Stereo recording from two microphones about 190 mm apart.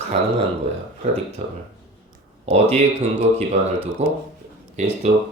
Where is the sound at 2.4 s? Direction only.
35° right (ahead or behind).